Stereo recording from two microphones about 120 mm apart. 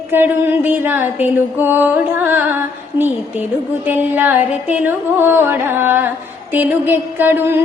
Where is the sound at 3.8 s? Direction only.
15° right (ahead or behind).